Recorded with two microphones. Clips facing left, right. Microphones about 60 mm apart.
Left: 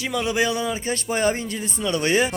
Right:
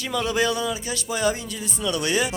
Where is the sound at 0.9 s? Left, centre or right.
Left.